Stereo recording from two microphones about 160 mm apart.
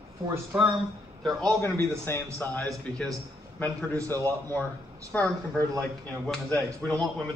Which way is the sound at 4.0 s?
20° right (ahead or behind).